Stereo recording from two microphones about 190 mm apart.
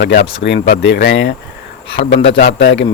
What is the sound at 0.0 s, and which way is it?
Speech, 55° left (ahead or behind).